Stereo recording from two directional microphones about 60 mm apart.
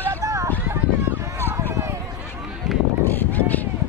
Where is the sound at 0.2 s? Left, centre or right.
Right.